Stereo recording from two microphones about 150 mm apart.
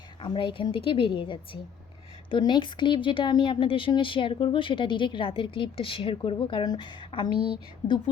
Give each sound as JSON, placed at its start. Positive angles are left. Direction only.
{"t": 0.2, "sound": "a woman's voice", "side_deg": 35}